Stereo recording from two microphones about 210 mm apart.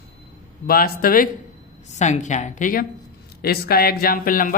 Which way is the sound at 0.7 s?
45° left (ahead or behind).